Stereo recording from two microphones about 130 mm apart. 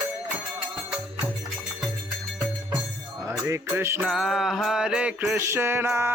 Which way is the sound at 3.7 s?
15° right (ahead or behind).